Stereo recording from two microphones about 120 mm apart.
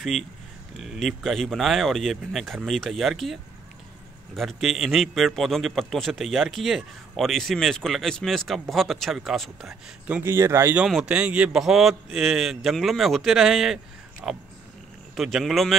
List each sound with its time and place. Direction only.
0.0 s a man's voice: centre (ahead or behind)
4.4 s a man's voice: centre (ahead or behind)
10.2 s speech: 20° right (ahead or behind)
10.8 s a man's voice: 5° right (ahead or behind)